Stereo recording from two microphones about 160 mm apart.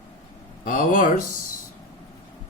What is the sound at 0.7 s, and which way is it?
Speech, 60° left (ahead or behind).